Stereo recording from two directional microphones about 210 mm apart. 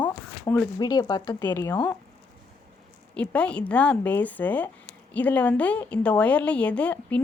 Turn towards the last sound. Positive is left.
turn(degrees=5)  # may be behind; listen again after turning